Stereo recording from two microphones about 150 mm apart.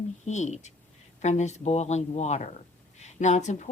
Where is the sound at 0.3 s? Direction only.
50° left (ahead or behind).